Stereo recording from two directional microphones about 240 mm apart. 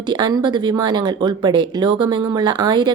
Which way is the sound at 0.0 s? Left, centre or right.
Centre.